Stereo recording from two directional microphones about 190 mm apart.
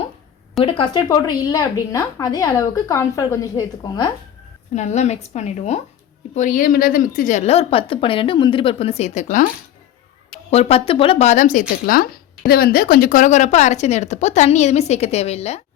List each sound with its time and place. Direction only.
0.6 s a woman's voice: 25° left (ahead or behind)
4.7 s a woman's voice: 40° left (ahead or behind)
10.5 s a woman's voice: 30° left (ahead or behind)